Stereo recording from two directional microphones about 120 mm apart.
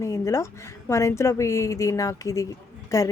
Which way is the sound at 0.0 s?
25° left (ahead or behind).